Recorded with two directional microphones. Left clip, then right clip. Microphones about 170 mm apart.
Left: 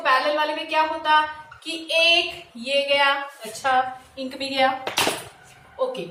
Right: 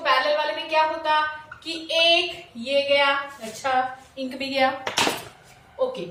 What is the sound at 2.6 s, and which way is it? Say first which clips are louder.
A woman's voice: even; 10° right (ahead or behind).